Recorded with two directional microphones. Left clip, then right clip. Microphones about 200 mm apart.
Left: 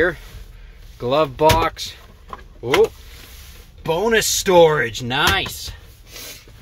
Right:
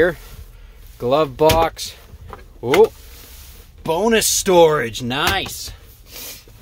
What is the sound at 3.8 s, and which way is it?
Speech, 10° right (ahead or behind).